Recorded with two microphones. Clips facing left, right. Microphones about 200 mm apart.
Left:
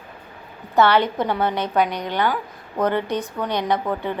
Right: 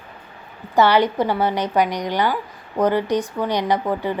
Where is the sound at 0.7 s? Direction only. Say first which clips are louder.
Right 1 dB; 10° right (ahead or behind).